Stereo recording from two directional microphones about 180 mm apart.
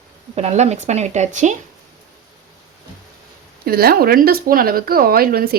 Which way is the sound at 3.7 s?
60° right (ahead or behind).